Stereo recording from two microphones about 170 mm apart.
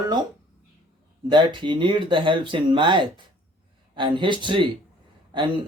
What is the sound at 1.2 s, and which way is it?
Speech, 30° right (ahead or behind).